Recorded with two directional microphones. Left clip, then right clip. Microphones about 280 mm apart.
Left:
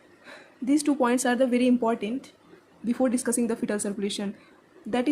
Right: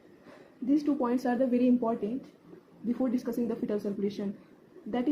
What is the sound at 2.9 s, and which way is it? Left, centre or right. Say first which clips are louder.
Speech: left 6 dB; left.